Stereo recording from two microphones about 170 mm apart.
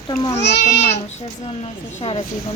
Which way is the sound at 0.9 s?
40° left (ahead or behind).